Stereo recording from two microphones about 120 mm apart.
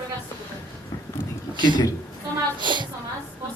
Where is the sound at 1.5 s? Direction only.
40° right (ahead or behind).